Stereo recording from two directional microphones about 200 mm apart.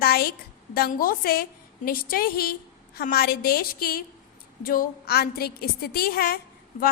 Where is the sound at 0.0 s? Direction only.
50° left (ahead or behind).